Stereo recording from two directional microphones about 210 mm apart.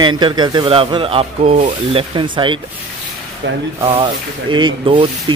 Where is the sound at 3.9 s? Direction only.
20° right (ahead or behind).